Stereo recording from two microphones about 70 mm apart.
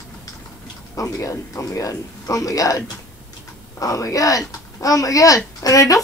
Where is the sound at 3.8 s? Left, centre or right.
Left.